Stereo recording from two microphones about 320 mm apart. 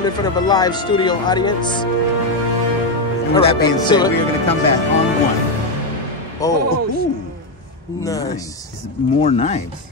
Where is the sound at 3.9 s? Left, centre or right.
Centre.